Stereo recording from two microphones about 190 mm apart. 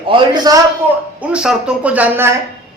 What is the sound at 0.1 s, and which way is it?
Speech, 20° right (ahead or behind).